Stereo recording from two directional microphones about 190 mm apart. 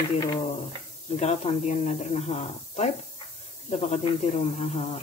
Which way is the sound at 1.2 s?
35° left (ahead or behind).